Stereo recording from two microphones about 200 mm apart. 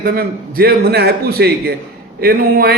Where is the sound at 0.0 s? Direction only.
50° right (ahead or behind).